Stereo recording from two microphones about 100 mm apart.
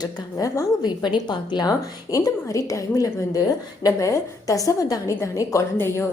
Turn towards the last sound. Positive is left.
turn(degrees=25)  # may be behind; listen again after turning